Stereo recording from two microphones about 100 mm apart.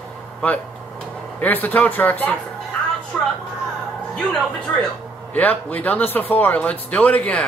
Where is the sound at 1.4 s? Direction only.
15° left (ahead or behind).